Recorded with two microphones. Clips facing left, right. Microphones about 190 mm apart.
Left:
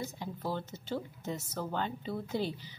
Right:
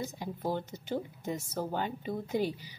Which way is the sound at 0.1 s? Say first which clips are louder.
Right 3 dB; 15° right (ahead or behind).